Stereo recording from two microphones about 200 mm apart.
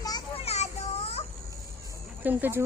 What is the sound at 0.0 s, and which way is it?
Children playing, 20° left (ahead or behind).